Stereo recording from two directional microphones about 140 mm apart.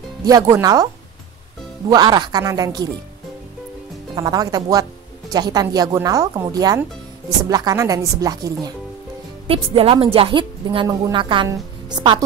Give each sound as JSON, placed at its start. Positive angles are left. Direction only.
{"t": 0.2, "sound": "speech", "side_deg": -25}
{"t": 1.9, "sound": "speech", "side_deg": -30}
{"t": 4.1, "sound": "speech", "side_deg": -30}
{"t": 9.5, "sound": "a woman's voice", "side_deg": -40}